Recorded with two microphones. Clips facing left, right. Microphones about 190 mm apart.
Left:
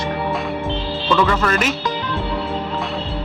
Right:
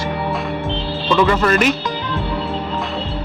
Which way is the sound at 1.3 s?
Centre (ahead or behind).